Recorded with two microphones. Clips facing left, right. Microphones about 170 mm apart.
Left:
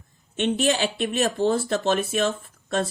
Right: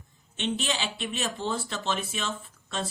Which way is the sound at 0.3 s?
50° left (ahead or behind).